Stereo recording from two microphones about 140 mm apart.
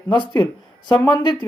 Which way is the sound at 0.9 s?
15° left (ahead or behind).